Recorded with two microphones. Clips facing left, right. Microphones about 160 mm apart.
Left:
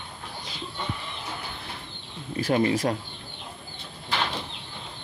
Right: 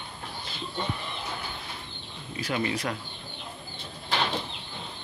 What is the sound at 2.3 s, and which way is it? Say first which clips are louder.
Speech: left 7 dB; 40° left (ahead or behind).